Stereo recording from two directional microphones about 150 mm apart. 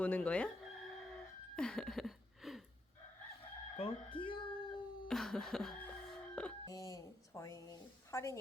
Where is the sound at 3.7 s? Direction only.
40° left (ahead or behind).